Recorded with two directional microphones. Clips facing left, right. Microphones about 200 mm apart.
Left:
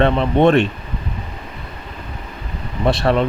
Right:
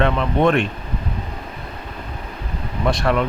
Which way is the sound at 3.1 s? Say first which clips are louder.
Left 3 dB; 30° left (ahead or behind).